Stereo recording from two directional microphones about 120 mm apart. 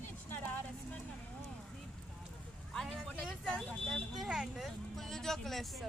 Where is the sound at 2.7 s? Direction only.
5° left (ahead or behind).